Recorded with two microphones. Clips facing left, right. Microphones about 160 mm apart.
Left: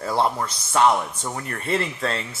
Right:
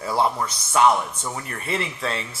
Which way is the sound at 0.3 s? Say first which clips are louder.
Even; 35° left (ahead or behind).